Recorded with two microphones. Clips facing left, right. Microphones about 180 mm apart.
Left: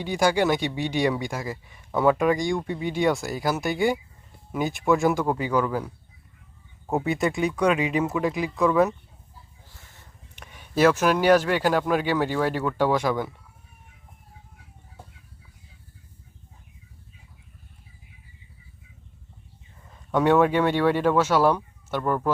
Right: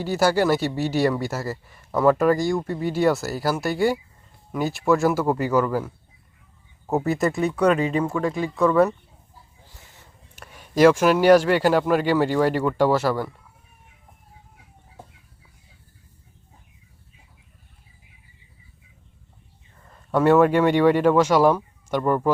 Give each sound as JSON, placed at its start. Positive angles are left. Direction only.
{"t": 0.1, "sound": "speech", "side_deg": -5}
{"t": 9.6, "sound": "a sound", "side_deg": -20}
{"t": 10.3, "sound": "a man's voice", "side_deg": -10}
{"t": 19.9, "sound": "speech", "side_deg": -5}